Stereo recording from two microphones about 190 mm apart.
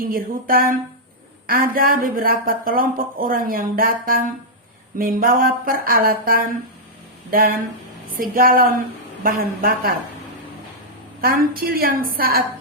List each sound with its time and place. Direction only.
0.0 s speech: 50° right (ahead or behind)
11.2 s speech: 50° right (ahead or behind)